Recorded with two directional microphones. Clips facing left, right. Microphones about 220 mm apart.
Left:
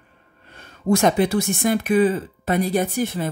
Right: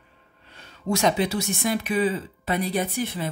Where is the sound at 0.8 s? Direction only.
50° left (ahead or behind).